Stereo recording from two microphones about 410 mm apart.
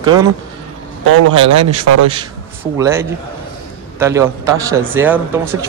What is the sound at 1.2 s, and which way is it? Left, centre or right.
Speech, right.